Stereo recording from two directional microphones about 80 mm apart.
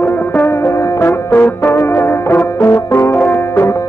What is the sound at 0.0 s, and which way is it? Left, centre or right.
Music, left.